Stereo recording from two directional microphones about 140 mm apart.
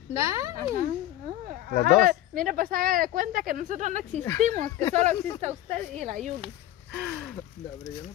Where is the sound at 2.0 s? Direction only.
90° right; by 6.5 s 60° right (ahead or behind).